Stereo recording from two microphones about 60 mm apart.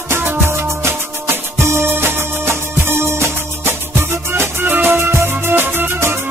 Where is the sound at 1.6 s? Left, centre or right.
Right.